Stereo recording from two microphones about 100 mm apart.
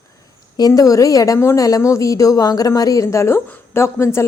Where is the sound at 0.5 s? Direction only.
40° left (ahead or behind).